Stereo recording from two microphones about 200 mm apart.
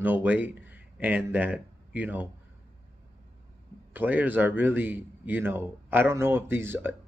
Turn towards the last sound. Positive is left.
turn(degrees=-10)  # may be behind; listen again after turning